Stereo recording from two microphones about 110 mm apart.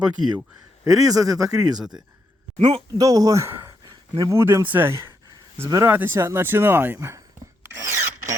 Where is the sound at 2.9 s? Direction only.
35° right (ahead or behind).